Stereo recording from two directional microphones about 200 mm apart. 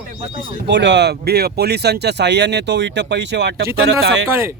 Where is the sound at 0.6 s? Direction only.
60° right (ahead or behind).